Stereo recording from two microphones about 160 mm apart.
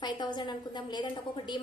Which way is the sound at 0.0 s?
30° left (ahead or behind).